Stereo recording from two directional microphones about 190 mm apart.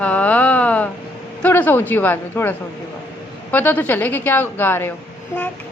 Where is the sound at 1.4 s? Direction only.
10° left (ahead or behind).